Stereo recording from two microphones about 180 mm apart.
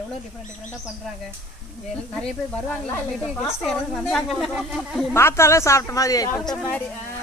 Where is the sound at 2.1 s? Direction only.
5° left (ahead or behind).